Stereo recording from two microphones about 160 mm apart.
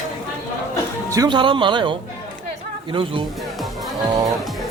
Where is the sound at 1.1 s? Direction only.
25° right (ahead or behind).